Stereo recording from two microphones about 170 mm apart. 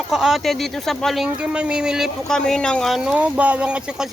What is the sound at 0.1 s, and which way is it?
Speech, 5° right (ahead or behind).